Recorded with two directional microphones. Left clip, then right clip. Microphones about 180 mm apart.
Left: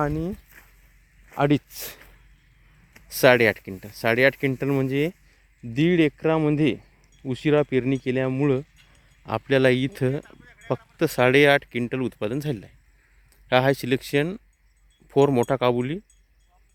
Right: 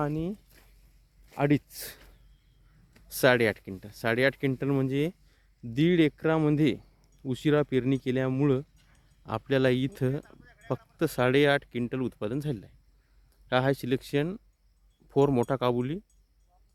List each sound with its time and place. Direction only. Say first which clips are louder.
0.0 s speech: left 5 dB; 25° left (ahead or behind); by 8.6 s 5° right (ahead or behind)
9.2 s speech: left 6 dB; 10° left (ahead or behind)